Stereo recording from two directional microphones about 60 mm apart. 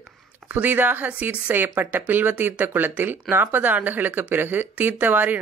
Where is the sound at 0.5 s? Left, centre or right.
Right.